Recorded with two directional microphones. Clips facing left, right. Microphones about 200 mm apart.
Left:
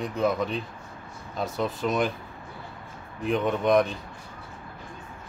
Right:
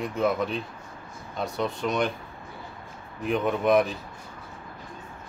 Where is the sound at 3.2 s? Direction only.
Centre (ahead or behind).